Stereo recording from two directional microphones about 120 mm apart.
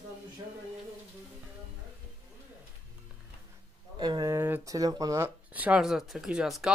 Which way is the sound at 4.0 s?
35° right (ahead or behind).